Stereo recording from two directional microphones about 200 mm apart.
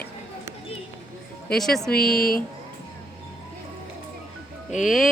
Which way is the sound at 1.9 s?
50° left (ahead or behind).